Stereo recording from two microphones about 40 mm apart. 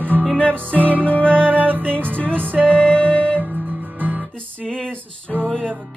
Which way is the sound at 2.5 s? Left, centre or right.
Left.